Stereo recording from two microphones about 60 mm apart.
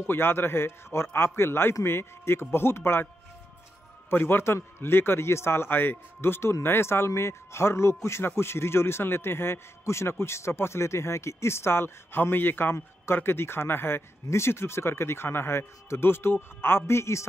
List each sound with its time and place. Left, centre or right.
0.0 s a man's voice: left
4.1 s a man's voice: left